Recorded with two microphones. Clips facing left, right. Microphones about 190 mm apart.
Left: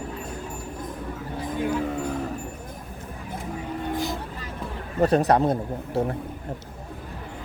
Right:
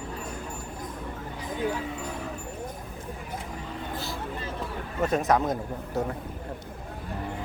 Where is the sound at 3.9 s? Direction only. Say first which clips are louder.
Left 7 dB; 15° left (ahead or behind).